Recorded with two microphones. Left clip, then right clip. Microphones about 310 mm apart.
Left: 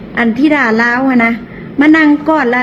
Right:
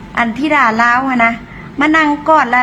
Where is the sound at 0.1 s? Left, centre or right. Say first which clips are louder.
Left 2 dB; right.